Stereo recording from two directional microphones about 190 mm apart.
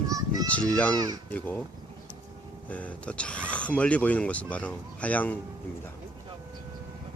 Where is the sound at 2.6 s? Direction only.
5° left (ahead or behind).